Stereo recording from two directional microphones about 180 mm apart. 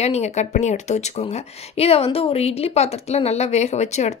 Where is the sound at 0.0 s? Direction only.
40° left (ahead or behind).